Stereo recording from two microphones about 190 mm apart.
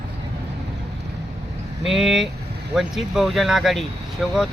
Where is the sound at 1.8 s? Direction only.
Centre (ahead or behind).